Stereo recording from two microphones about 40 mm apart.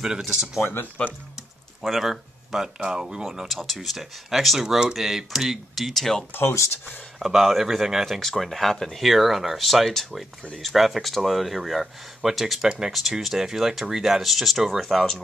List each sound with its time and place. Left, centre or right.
0.6 s speech: left
1.9 s speech: centre
2.6 s speech: centre
3.4 s speech: centre
4.6 s speech: centre
4.9 s speech: centre
7.2 s speech: centre
8.1 s speech: centre
9.0 s speech: centre